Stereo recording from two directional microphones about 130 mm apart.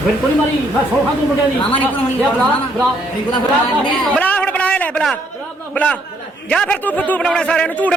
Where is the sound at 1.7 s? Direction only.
10° left (ahead or behind).